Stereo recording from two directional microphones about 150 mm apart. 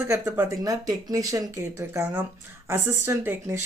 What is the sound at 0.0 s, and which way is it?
Speech, 15° right (ahead or behind).